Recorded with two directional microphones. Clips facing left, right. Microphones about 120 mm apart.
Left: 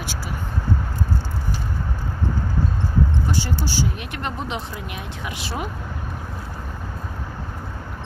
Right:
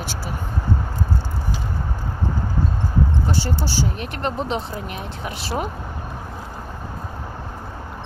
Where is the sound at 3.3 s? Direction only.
35° right (ahead or behind).